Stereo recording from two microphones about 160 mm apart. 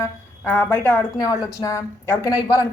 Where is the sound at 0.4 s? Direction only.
10° left (ahead or behind).